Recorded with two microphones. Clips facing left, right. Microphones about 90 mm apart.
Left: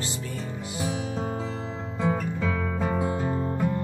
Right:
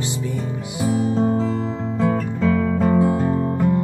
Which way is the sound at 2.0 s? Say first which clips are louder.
Right 6 dB; 5° left (ahead or behind).